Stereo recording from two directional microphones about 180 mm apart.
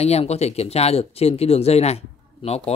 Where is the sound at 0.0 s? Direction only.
35° left (ahead or behind).